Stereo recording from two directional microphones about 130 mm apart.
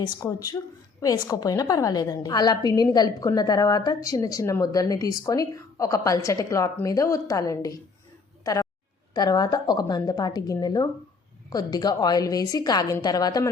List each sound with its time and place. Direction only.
0.2 s a woman's voice: 25° left (ahead or behind)
9.1 s a woman's voice: 30° left (ahead or behind)